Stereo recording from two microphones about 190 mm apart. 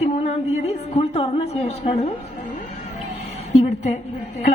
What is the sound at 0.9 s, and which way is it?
A woman's voice, 30° left (ahead or behind).